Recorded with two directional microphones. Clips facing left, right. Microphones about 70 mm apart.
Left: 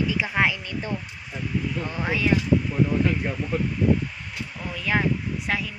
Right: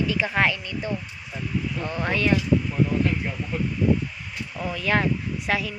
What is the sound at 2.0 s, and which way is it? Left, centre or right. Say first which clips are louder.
Speech: right 1 dB; centre.